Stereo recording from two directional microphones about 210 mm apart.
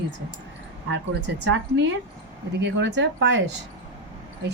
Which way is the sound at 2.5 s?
55° right (ahead or behind).